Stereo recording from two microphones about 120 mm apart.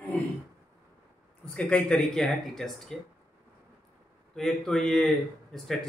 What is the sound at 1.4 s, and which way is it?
Speech, 10° left (ahead or behind).